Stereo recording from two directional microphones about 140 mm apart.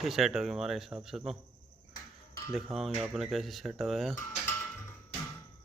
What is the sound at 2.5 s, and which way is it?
Speech, centre (ahead or behind).